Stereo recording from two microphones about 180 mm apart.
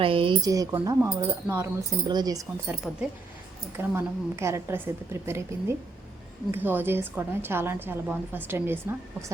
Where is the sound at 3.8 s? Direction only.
15° right (ahead or behind).